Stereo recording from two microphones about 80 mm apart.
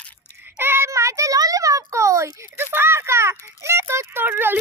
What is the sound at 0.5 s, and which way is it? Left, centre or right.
Child singing, right.